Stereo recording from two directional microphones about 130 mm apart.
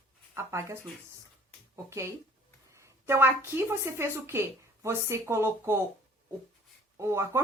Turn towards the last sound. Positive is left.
turn(degrees=-20)  # may be behind; listen again after turning